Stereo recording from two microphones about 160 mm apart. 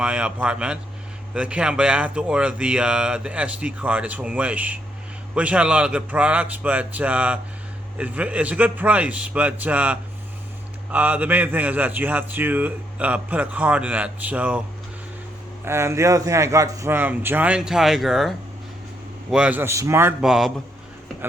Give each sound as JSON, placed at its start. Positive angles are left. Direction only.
{"t": 0.0, "sound": "a man's voice", "side_deg": -5}
{"t": 15.6, "sound": "a man's voice", "side_deg": -15}
{"t": 20.2, "sound": "a man's voice", "side_deg": -5}